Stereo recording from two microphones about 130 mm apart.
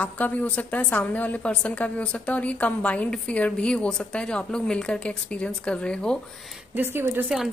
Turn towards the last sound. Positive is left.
turn(degrees=0)  # may be behind; listen again after turning